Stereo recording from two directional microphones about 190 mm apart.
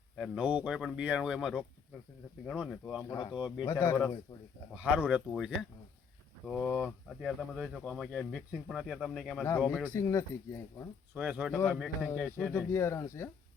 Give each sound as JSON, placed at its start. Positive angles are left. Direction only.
{"t": 0.2, "sound": "speech", "side_deg": -5}
{"t": 2.6, "sound": "speech", "side_deg": 5}
{"t": 3.1, "sound": "speech", "side_deg": 20}
{"t": 4.7, "sound": "speech", "side_deg": -5}
{"t": 9.4, "sound": "speech", "side_deg": 10}
{"t": 11.1, "sound": "speech", "side_deg": -5}